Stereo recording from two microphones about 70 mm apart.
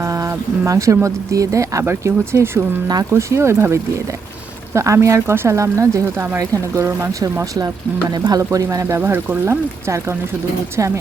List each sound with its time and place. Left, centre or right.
0.0 s a sound: right
0.7 s speech: right
1.9 s speech: right
2.8 s speech: right
3.1 s speech: right
8.1 s speech: right
8.5 s speech: right
9.0 s speech: right